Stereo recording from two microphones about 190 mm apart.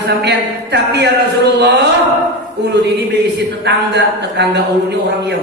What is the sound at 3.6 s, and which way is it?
Speech, 60° right (ahead or behind).